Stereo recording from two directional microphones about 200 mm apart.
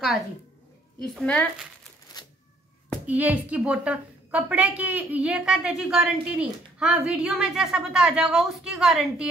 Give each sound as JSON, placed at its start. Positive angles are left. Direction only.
{"t": 1.1, "sound": "a woman's voice", "side_deg": 0}
{"t": 2.1, "sound": "a sound", "side_deg": 20}
{"t": 3.1, "sound": "a woman's voice", "side_deg": -10}